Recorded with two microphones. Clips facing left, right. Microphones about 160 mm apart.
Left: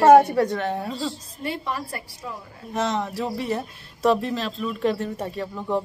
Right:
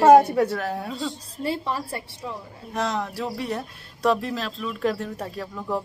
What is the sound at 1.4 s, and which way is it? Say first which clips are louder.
Speech: right 2 dB; 30° right (ahead or behind).